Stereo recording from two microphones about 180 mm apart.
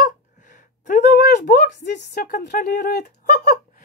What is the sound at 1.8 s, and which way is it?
Speech, 70° left (ahead or behind).